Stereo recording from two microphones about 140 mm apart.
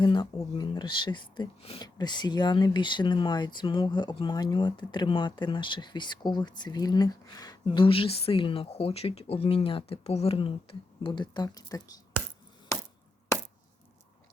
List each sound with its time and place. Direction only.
0.0 s speech: 30° left (ahead or behind)